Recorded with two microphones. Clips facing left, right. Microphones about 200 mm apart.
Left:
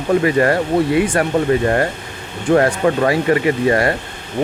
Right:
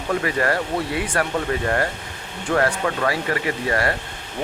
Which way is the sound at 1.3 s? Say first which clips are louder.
Left 8 dB; 25° left (ahead or behind).